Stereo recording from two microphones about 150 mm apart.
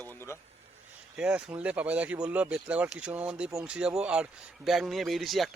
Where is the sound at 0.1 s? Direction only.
15° left (ahead or behind).